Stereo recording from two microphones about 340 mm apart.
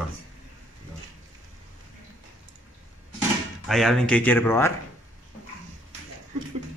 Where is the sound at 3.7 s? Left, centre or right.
Centre.